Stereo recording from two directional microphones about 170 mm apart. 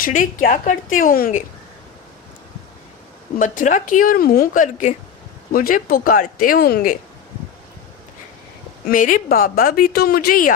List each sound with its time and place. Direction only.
0.0 s speech: 50° left (ahead or behind)
3.3 s speech: 50° left (ahead or behind)
8.9 s speech: 50° left (ahead or behind)